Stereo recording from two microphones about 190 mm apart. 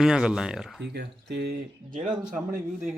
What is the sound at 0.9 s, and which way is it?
Speech, 60° right (ahead or behind).